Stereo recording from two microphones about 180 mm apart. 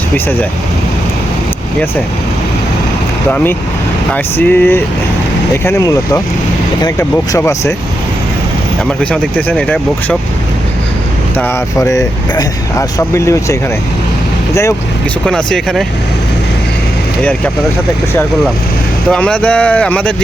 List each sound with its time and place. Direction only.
3.2 s speech: 10° left (ahead or behind)
7.3 s speech: 15° left (ahead or behind)
8.9 s speech: 5° left (ahead or behind)
11.3 s speech: 15° left (ahead or behind)
15.3 s speech: 5° left (ahead or behind)
19.1 s speech: 5° left (ahead or behind)